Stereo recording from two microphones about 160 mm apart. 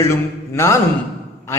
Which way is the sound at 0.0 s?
15° left (ahead or behind).